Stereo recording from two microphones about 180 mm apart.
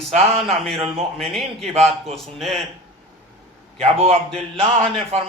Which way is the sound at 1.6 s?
35° right (ahead or behind).